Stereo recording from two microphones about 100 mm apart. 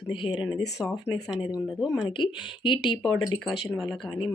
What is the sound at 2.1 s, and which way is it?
Speech, 55° left (ahead or behind).